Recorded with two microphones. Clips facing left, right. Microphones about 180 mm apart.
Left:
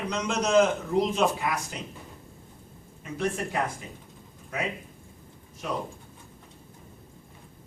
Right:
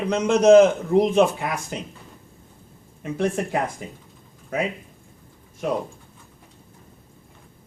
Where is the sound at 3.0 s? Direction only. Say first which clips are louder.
Right 6 dB; 55° right (ahead or behind).